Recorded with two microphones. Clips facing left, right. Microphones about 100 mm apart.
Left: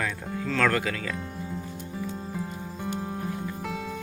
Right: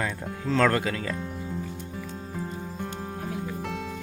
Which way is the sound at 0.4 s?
25° right (ahead or behind).